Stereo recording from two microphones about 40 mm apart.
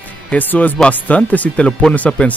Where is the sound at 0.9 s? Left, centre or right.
Left.